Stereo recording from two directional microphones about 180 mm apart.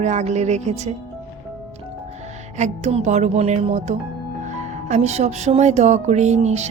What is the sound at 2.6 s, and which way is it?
Speech, 40° right (ahead or behind).